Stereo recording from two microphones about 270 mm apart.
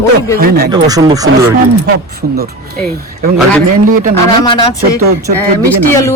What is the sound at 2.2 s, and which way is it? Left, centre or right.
Speech, right.